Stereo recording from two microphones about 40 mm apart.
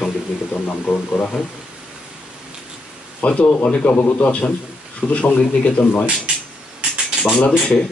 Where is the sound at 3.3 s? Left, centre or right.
Left.